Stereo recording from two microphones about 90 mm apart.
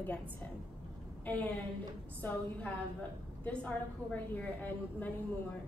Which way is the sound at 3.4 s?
10° left (ahead or behind).